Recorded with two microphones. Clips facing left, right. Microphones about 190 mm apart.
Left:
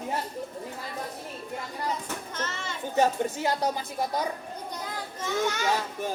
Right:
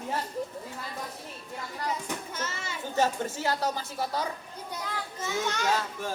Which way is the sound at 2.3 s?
10° right (ahead or behind).